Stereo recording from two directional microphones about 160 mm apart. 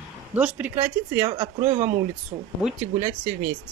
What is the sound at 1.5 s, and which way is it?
Speech, 50° right (ahead or behind).